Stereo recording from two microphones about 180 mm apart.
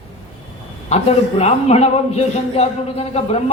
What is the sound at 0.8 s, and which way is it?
A man's voice, 35° left (ahead or behind).